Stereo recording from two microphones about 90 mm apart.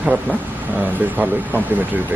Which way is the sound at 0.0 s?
15° right (ahead or behind).